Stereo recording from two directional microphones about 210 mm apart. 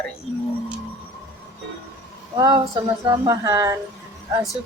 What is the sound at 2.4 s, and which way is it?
Speech, 15° right (ahead or behind).